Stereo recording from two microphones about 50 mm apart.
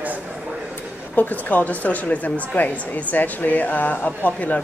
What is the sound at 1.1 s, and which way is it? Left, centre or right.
Speech, left.